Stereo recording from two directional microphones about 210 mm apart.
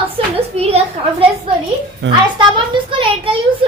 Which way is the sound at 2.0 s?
55° right (ahead or behind).